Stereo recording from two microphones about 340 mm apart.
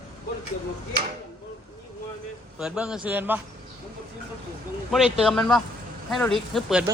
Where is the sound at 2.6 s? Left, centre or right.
Centre.